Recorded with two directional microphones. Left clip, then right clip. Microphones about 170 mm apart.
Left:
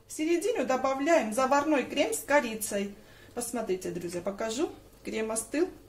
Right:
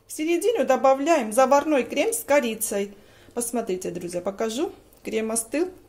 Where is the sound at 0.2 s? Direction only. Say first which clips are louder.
Right 6 dB; 55° right (ahead or behind).